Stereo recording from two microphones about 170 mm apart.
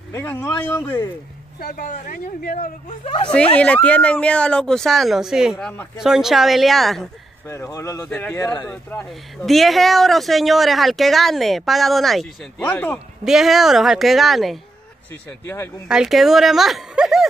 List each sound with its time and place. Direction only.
0.1 s speech: 15° left (ahead or behind)
1.6 s speech: 55° left (ahead or behind)
3.0 s speech: 30° left (ahead or behind)
3.5 s speech: 5° left (ahead or behind)
7.4 s speech: 15° left (ahead or behind)
13.2 s speech: centre (ahead or behind)
15.2 s speech: 15° left (ahead or behind)
15.9 s speech: 5° right (ahead or behind)